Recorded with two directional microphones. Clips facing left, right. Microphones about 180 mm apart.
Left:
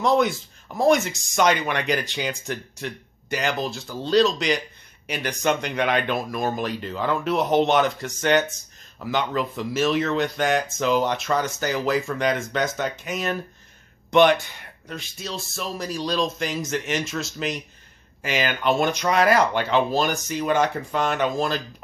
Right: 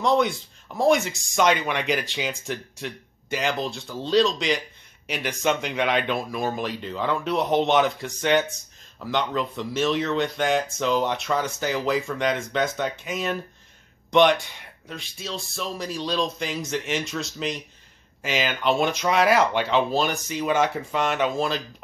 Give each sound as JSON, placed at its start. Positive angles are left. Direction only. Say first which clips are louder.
{"t": 0.0, "sound": "speech", "louder": "left 1 dB", "side_deg": 0}